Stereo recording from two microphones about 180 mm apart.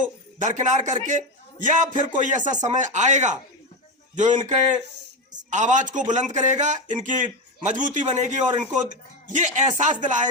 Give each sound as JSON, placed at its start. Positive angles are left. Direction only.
{"t": 0.0, "sound": "a man's voice", "side_deg": -45}